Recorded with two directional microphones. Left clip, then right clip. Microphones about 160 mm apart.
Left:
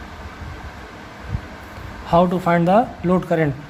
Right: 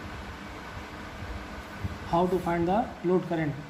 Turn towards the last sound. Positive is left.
turn(degrees=60)  # may be behind; listen again after turning